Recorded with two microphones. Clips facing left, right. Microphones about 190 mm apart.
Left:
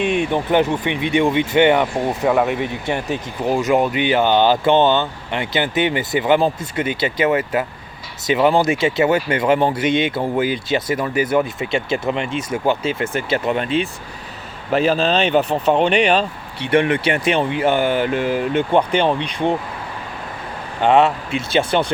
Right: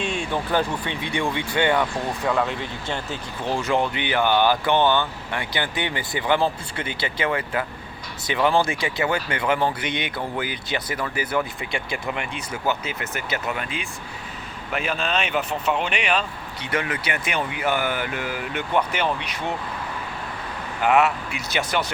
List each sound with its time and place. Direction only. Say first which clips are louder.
0.0 s speech: left 8 dB; 60° left (ahead or behind)
0.3 s speech: left 6 dB; 20° left (ahead or behind)
14.7 s speech: left 9 dB; 35° left (ahead or behind)
20.8 s speech: left 5 dB; 30° left (ahead or behind)